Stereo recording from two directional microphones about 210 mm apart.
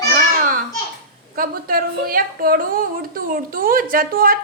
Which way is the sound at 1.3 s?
45° right (ahead or behind).